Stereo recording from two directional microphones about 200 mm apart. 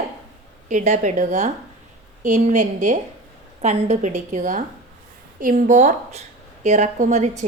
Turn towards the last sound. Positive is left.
turn(degrees=-35)  # may be behind; listen again after turning